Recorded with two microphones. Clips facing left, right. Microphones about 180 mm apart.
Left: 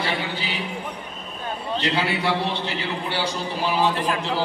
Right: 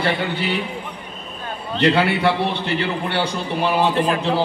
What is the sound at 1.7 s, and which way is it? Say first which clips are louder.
A man's voice: right 8 dB; 60° right (ahead or behind).